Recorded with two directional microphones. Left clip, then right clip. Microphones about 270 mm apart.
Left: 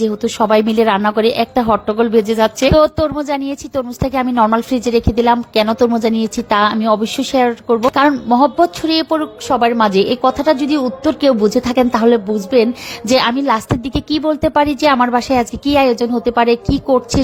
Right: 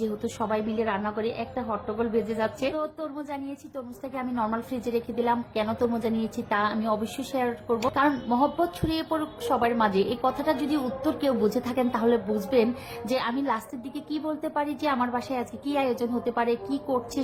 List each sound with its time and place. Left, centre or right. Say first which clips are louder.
0.2 s a woman's voice: left 16 dB; left